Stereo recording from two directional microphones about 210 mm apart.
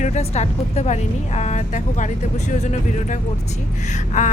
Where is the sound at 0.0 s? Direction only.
35° left (ahead or behind).